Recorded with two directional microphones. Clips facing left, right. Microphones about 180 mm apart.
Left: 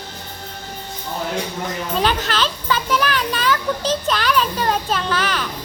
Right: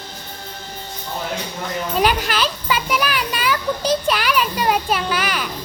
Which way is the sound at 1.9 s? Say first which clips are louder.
Right 2 dB; 10° right (ahead or behind).